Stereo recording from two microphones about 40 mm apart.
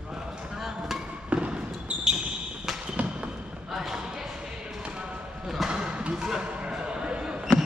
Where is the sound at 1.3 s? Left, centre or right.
Right.